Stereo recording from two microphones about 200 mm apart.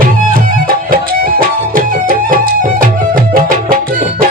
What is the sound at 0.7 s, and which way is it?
Music, 45° right (ahead or behind).